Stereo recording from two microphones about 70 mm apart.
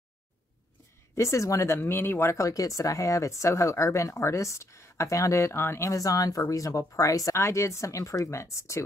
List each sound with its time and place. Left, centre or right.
1.1 s speech: left
1.8 s speech: left
5.9 s speech: left
7.3 s speech: left